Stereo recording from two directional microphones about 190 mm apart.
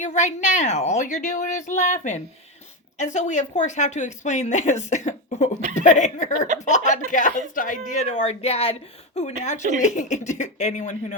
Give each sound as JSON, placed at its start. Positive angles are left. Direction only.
{"t": 0.0, "sound": "speech", "side_deg": 40}
{"t": 9.8, "sound": "speech", "side_deg": 40}